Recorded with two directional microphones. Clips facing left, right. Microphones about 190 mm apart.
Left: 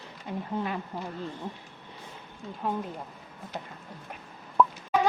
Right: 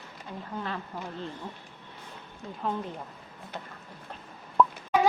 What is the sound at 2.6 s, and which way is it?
Speech, 5° left (ahead or behind).